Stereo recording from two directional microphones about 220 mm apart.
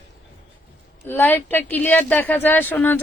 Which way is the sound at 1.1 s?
10° left (ahead or behind).